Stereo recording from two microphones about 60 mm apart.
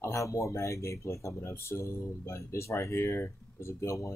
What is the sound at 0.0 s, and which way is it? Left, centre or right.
Speech, left.